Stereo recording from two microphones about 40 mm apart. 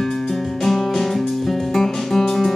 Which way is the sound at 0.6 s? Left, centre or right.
Centre.